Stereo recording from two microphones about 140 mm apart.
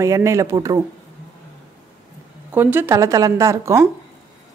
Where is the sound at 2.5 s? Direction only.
15° right (ahead or behind).